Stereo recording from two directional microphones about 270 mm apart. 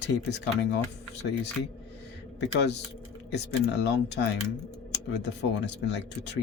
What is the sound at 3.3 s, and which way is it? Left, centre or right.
Speech, left.